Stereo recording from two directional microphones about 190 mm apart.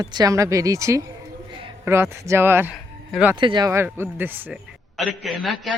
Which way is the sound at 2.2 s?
15° right (ahead or behind).